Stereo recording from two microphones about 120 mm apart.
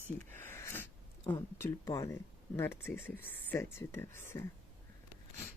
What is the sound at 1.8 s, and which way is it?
Speech, 25° left (ahead or behind).